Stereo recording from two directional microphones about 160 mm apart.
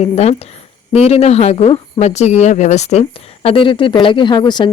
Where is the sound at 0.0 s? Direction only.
40° left (ahead or behind).